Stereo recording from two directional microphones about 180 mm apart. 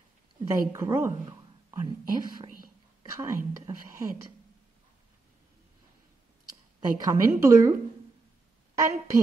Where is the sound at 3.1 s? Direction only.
20° right (ahead or behind).